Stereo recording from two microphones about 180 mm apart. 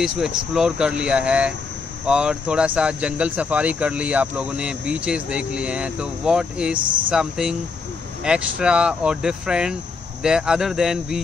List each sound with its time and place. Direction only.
0.0 s speech: 5° right (ahead or behind)